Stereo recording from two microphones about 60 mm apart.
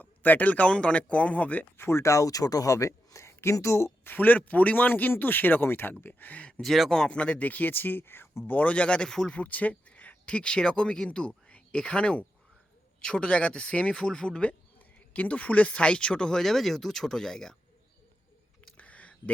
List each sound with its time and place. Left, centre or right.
0.0 s speech: left
1.8 s speech: left
4.0 s speech: left
6.6 s speech: centre
6.9 s speech: centre; by 8.5 s left
8.5 s speech: left
9.3 s speech: left
18.6 s a sound: left